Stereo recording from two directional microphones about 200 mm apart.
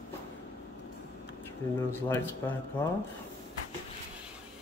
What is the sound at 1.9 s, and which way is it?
Speech, 10° left (ahead or behind).